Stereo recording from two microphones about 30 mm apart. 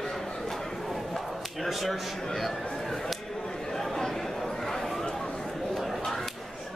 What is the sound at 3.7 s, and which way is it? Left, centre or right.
Chatter, centre.